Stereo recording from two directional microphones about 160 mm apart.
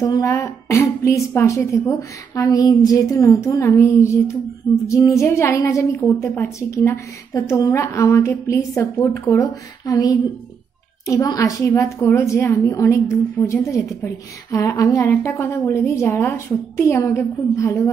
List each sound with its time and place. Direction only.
0.0 s a woman's voice: 20° left (ahead or behind)